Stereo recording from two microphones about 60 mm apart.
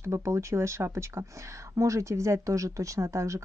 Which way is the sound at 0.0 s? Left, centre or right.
Right.